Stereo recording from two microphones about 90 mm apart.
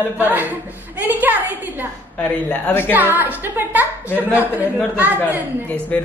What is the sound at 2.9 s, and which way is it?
Speech, 20° right (ahead or behind).